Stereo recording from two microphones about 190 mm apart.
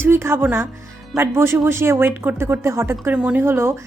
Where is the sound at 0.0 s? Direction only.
10° right (ahead or behind).